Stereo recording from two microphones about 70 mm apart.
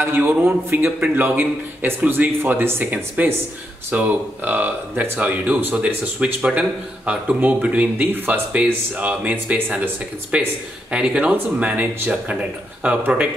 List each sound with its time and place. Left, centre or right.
0.0 s a man's voice: right
0.9 s a man's voice: right